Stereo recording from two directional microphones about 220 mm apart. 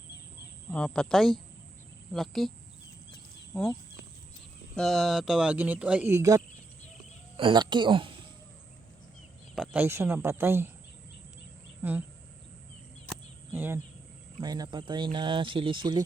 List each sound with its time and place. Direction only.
0.7 s speech: 5° left (ahead or behind)
3.5 s speech: 5° left (ahead or behind)
4.7 s speech: centre (ahead or behind); by 8.1 s 20° right (ahead or behind)
9.6 s speech: 10° right (ahead or behind)
11.8 s speech: 10° right (ahead or behind)
13.5 s speech: 10° right (ahead or behind)